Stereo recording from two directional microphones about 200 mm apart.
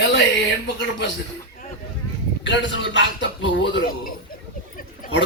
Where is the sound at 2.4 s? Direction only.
65° left (ahead or behind).